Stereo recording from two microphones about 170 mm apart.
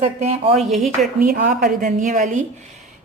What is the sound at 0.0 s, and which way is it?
Speech, 40° right (ahead or behind).